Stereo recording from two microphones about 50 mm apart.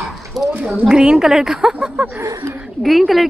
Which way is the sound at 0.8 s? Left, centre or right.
Centre.